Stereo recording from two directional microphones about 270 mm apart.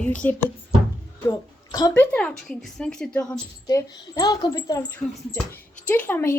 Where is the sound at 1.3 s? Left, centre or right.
Centre.